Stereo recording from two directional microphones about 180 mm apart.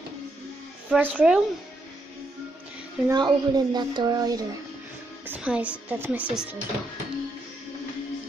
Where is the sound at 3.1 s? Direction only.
25° right (ahead or behind).